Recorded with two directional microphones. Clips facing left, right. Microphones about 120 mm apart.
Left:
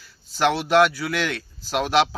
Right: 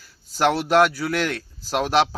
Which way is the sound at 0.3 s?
40° right (ahead or behind).